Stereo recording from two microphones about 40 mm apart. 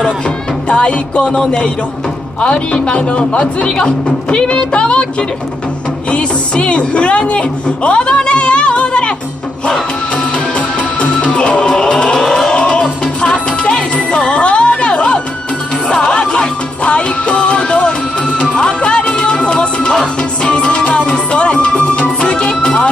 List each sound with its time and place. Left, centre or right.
0.7 s a woman's voice: left
6.0 s speech: left
9.7 s music: left
12.2 s music: centre
12.5 s music: left